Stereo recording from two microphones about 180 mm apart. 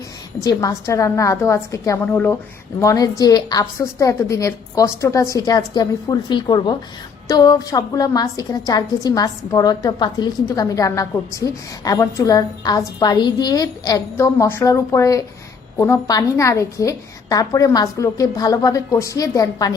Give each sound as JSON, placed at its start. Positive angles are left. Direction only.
{"t": 0.3, "sound": "a woman's voice", "side_deg": 20}